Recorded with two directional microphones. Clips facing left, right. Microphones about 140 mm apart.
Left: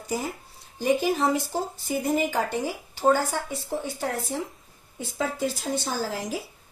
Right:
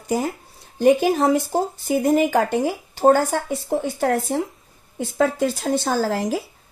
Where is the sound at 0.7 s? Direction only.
60° right (ahead or behind).